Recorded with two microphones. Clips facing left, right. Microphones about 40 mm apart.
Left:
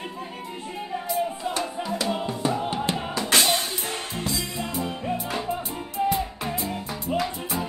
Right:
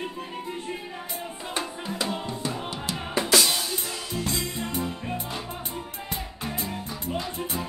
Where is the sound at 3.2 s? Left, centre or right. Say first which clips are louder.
Left 2 dB; left.